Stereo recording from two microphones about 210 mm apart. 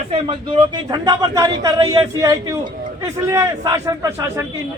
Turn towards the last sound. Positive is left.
turn(degrees=-15)  # may be behind; listen again after turning